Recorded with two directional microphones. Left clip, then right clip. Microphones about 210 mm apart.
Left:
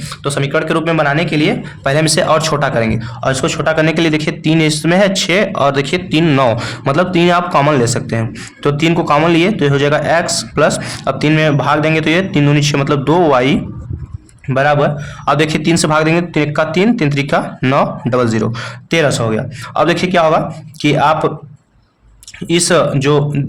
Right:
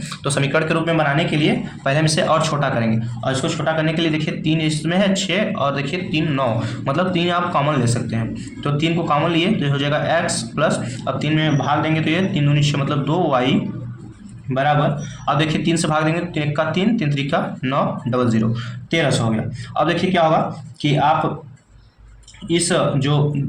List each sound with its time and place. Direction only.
0.3 s speech: 25° left (ahead or behind)
0.9 s speech: 45° left (ahead or behind)
14.5 s speech: 55° left (ahead or behind)
15.2 s speech: 45° left (ahead or behind)
19.7 s speech: 45° left (ahead or behind)
22.4 s speech: 55° left (ahead or behind)